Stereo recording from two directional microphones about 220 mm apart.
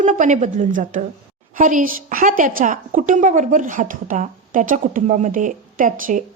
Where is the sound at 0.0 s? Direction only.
35° right (ahead or behind).